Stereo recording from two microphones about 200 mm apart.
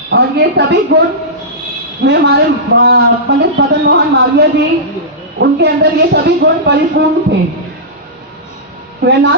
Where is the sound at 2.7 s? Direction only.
60° right (ahead or behind).